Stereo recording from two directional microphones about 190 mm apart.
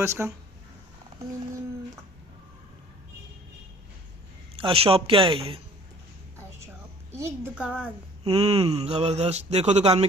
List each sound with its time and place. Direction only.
0.0 s speech: 15° right (ahead or behind)
4.6 s speech: 30° right (ahead or behind)
6.6 s a sound: 15° right (ahead or behind)
8.2 s speech: 35° right (ahead or behind)